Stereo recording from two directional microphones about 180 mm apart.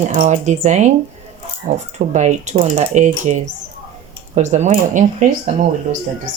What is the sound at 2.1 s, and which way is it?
Speech, 40° right (ahead or behind).